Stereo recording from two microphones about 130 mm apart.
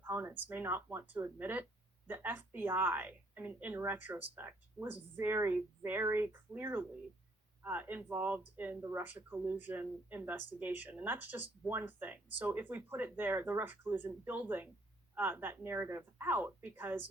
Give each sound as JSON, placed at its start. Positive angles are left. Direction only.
{"t": 0.0, "sound": "speech", "side_deg": -20}